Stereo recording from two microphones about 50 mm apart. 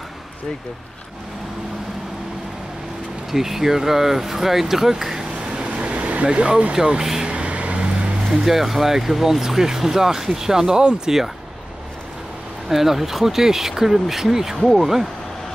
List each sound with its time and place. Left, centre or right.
3.3 s speech: centre; by 6.2 s right
6.2 s vehicle: centre
8.3 s speech: centre
12.6 s speech: centre